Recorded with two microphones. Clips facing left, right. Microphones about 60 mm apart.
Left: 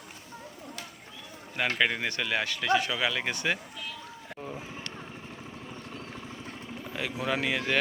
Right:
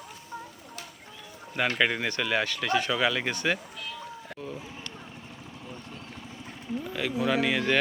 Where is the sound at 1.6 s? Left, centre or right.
Centre.